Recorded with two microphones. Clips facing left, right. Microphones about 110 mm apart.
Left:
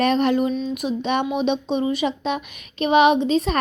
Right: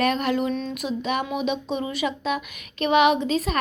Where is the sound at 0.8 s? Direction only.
20° left (ahead or behind).